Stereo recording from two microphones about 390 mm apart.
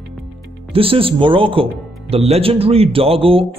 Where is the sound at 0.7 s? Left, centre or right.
Centre.